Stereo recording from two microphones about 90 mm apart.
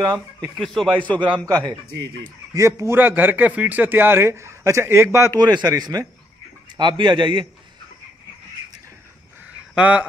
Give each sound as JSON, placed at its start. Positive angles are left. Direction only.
{"t": 0.6, "sound": "a man's voice", "side_deg": 5}
{"t": 2.5, "sound": "a man's voice", "side_deg": -35}
{"t": 3.0, "sound": "a man's voice", "side_deg": -20}
{"t": 5.3, "sound": "a man's voice", "side_deg": -50}
{"t": 6.8, "sound": "a man's voice", "side_deg": -60}
{"t": 9.5, "sound": "a sound", "side_deg": -15}